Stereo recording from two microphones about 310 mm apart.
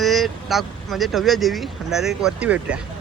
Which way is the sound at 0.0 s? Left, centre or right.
Centre.